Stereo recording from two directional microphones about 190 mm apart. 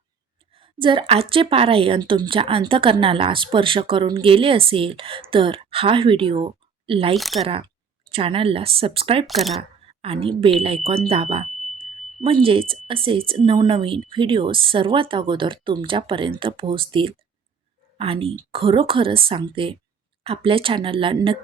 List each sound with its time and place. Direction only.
0.5 s a woman's voice: 25° right (ahead or behind)
7.2 s speech: centre (ahead or behind)
8.1 s a woman's voice: 30° right (ahead or behind)
9.2 s speech: centre (ahead or behind)
9.6 s a woman's voice: 30° right (ahead or behind)
11.1 s a sound: 30° right (ahead or behind)
12.2 s a woman's voice: 30° right (ahead or behind)